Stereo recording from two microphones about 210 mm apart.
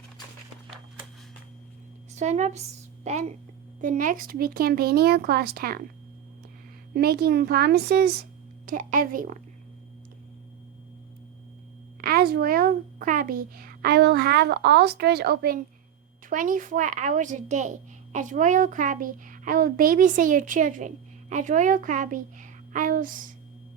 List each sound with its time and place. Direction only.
2.1 s a woman's voice: 35° right (ahead or behind)
6.9 s a child's voice: 50° right (ahead or behind)
11.9 s a child's voice: 45° right (ahead or behind)